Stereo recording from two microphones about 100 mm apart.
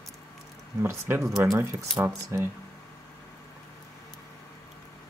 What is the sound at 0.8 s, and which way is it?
Speech, 25° right (ahead or behind).